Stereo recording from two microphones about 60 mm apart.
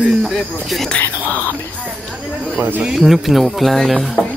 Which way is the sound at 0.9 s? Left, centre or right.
Left.